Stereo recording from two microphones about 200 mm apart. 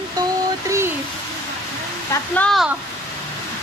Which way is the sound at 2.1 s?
5° left (ahead or behind).